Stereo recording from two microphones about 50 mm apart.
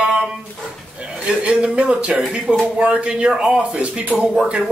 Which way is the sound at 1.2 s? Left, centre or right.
Right.